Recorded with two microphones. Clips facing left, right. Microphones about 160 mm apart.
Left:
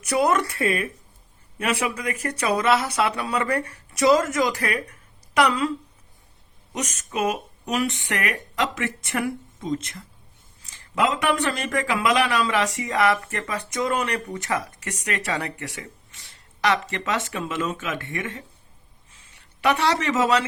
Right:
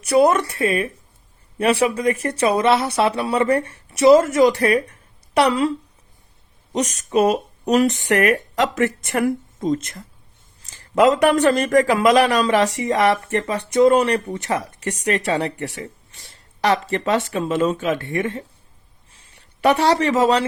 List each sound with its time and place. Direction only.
0.0 s a woman's voice: 30° right (ahead or behind)
6.7 s a man's voice: 35° right (ahead or behind)